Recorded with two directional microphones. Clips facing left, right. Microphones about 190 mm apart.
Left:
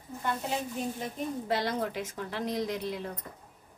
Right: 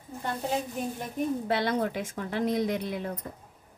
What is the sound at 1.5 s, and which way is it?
A woman's voice, 55° right (ahead or behind).